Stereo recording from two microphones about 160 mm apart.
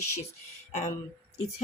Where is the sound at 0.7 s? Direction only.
40° left (ahead or behind).